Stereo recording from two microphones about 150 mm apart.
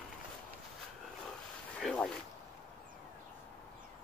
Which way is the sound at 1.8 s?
5° left (ahead or behind).